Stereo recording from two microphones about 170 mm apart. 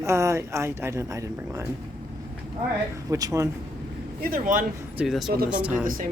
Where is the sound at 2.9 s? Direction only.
20° right (ahead or behind).